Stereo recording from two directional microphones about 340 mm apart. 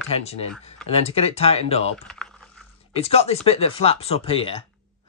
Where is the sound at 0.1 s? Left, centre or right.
Centre.